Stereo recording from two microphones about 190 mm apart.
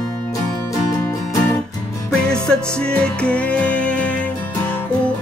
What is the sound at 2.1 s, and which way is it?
Music, 5° left (ahead or behind).